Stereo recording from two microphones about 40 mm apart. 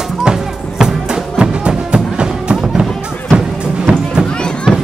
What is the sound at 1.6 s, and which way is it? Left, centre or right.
Music, right.